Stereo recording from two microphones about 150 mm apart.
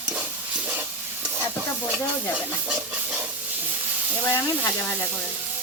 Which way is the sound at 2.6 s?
10° right (ahead or behind).